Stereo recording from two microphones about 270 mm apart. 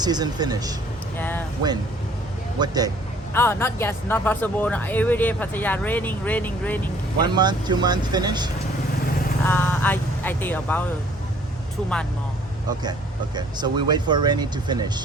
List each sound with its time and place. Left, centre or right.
0.0 s speech: centre
1.2 s speech: centre
2.6 s speech: centre
3.3 s speech: centre
7.2 s speech: centre
9.5 s speech: centre
13.3 s speech: centre